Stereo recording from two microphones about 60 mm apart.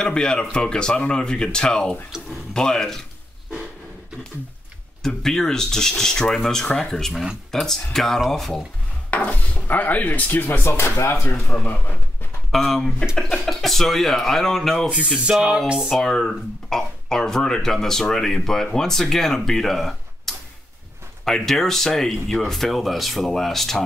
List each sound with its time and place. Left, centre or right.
0.0 s speech: centre
5.0 s speech: centre
9.1 s speech: left
10.6 s speech: left
12.4 s speech: centre
14.9 s speech: centre
15.9 s speech: centre